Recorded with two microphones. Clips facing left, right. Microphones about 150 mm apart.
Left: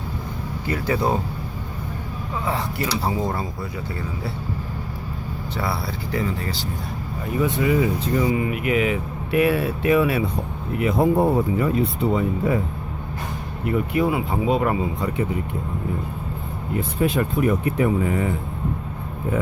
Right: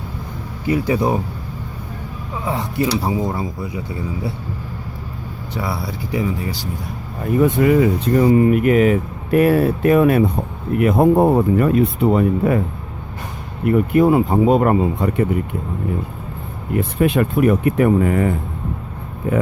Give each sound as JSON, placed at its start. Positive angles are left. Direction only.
{"t": 0.7, "sound": "speech", "side_deg": -15}
{"t": 2.4, "sound": "speech", "side_deg": -15}
{"t": 5.5, "sound": "speech", "side_deg": -15}
{"t": 7.4, "sound": "speech", "side_deg": -55}
{"t": 13.7, "sound": "speech", "side_deg": -50}
{"t": 16.7, "sound": "speech", "side_deg": -65}